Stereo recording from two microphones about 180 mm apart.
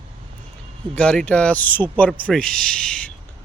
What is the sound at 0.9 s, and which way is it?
Speech, 5° left (ahead or behind).